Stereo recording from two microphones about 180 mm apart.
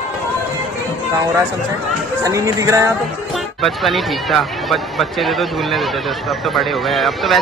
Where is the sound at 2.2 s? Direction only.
15° right (ahead or behind).